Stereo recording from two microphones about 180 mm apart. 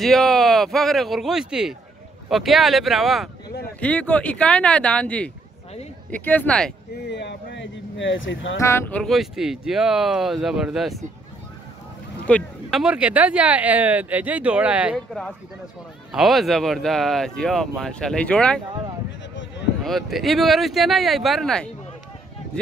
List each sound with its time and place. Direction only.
0.0 s speech: centre (ahead or behind)
7.1 s speech: 75° left (ahead or behind); by 8.5 s 90° left
8.5 s speech: 15° left (ahead or behind); by 11.0 s centre (ahead or behind)
12.3 s speech: 5° left (ahead or behind)
12.7 s speech: 5° right (ahead or behind)
19.8 s speech: centre (ahead or behind)